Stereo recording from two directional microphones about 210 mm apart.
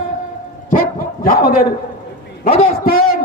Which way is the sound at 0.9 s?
45° left (ahead or behind).